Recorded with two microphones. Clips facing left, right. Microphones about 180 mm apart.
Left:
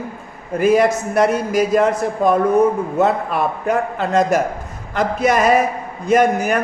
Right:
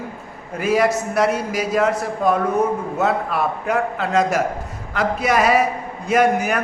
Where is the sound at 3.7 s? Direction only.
50° left (ahead or behind).